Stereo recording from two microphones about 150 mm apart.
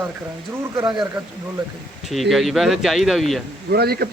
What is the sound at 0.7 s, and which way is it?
Speech, 25° right (ahead or behind).